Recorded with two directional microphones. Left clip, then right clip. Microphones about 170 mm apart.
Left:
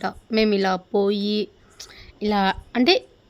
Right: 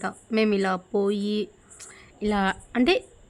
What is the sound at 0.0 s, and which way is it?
A woman's voice, 10° left (ahead or behind).